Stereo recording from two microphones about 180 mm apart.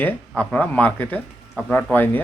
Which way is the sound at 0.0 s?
5° left (ahead or behind).